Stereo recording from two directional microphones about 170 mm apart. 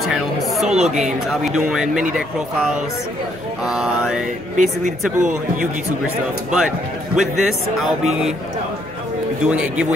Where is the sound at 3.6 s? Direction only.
5° right (ahead or behind).